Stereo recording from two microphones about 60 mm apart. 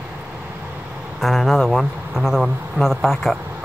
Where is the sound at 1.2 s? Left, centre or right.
Centre.